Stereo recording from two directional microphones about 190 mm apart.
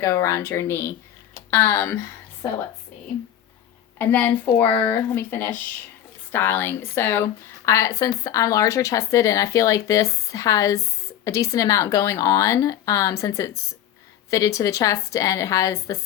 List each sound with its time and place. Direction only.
0.0 s speech: 15° left (ahead or behind)
3.9 s speech: 10° left (ahead or behind)